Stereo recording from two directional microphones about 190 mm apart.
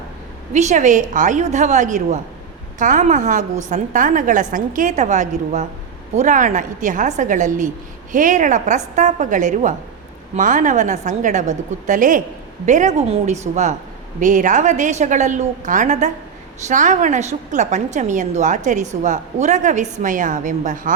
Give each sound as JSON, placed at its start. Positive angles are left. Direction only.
{"t": 0.5, "sound": "a woman's voice", "side_deg": -40}